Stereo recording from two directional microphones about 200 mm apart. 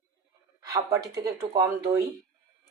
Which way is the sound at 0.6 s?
15° right (ahead or behind).